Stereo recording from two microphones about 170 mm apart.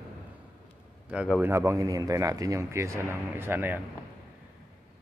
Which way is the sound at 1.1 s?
5° right (ahead or behind).